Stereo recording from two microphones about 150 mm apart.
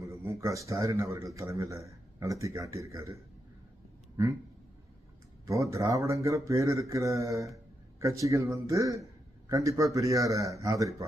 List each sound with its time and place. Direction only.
0.1 s a man's voice: 20° right (ahead or behind)
5.7 s speech: 20° right (ahead or behind)